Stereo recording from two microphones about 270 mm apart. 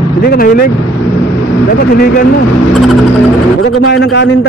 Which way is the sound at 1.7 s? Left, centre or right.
Left.